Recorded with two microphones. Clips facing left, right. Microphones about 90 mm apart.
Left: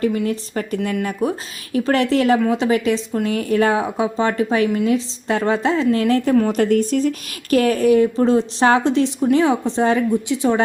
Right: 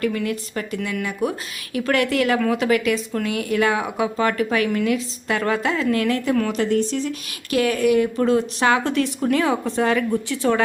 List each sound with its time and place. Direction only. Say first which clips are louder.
0.0 s speech: left 3 dB; 25° left (ahead or behind)
6.5 s speech: left 4 dB; 50° left (ahead or behind); by 10.6 s 20° left (ahead or behind)